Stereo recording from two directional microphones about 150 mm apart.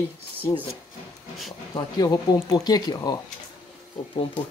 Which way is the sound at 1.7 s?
25° left (ahead or behind).